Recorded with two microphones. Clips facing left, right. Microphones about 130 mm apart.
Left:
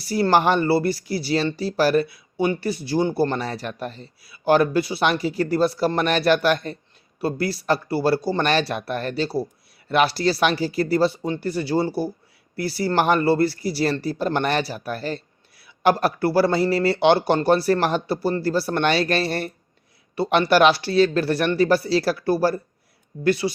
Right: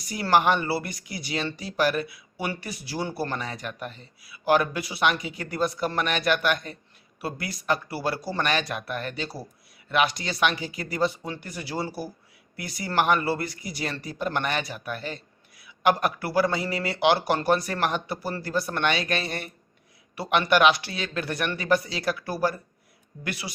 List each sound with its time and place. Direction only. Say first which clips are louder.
0.0 s speech: left 4 dB; 35° left (ahead or behind)